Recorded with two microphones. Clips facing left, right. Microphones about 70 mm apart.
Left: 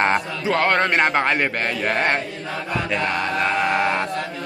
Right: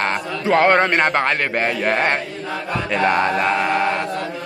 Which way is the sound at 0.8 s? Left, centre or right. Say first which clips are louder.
Right 1 dB; centre.